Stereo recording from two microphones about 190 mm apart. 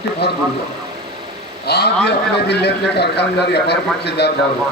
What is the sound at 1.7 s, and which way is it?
Speech, 60° left (ahead or behind).